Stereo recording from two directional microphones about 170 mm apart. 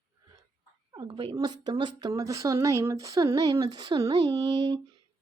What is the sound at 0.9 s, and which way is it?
Speech, 25° right (ahead or behind).